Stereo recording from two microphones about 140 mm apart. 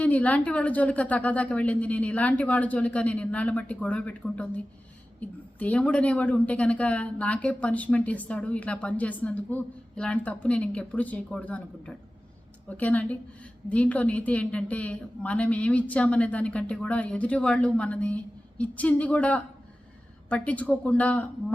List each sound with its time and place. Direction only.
0.0 s speech: 10° left (ahead or behind)